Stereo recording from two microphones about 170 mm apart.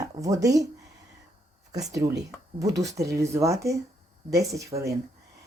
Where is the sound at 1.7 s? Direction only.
20° right (ahead or behind).